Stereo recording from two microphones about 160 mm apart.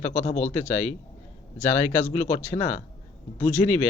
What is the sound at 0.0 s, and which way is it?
A man's voice, 45° left (ahead or behind).